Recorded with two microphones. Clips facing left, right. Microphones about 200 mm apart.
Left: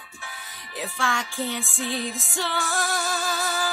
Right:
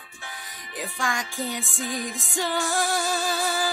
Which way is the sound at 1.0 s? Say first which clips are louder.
Left 1 dB; 15° right (ahead or behind).